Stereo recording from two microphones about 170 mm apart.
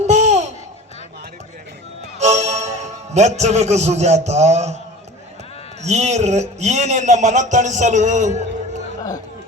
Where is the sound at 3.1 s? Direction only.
40° right (ahead or behind).